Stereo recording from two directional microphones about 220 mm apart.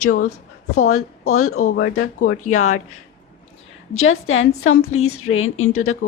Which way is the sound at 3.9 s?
65° left (ahead or behind).